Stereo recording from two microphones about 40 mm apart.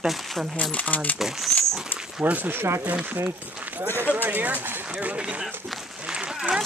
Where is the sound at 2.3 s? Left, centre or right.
Right.